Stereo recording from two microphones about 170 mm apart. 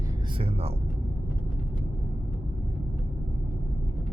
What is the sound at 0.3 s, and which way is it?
Music, 35° right (ahead or behind).